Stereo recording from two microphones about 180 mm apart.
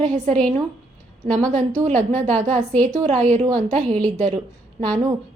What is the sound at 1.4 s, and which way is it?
A woman's voice, 45° right (ahead or behind).